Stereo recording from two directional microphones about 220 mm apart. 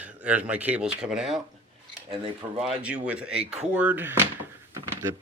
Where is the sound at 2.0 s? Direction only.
20° right (ahead or behind).